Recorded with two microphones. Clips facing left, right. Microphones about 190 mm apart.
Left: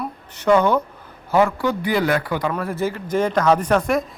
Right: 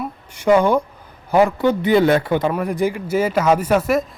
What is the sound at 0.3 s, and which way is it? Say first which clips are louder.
A man's voice: right 2 dB; 10° right (ahead or behind).